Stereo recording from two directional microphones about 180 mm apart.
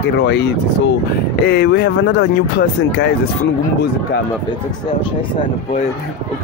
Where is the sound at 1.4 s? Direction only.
65° left (ahead or behind).